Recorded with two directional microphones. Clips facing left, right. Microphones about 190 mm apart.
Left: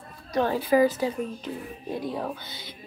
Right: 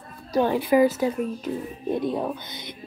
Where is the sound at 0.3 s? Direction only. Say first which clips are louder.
Right 3 dB; 30° right (ahead or behind).